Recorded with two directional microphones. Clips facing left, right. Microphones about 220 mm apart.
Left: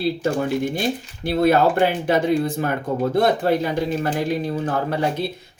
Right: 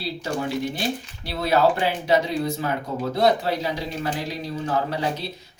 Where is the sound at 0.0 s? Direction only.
50° left (ahead or behind).